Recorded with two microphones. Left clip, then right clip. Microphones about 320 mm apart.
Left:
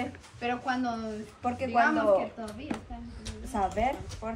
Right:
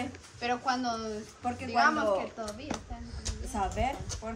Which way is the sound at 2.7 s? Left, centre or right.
Centre.